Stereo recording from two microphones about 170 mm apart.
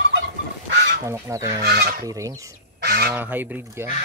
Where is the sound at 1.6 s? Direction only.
65° right (ahead or behind).